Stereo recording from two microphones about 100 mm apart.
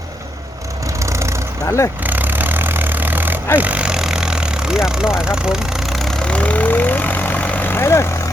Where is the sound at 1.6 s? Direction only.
30° left (ahead or behind).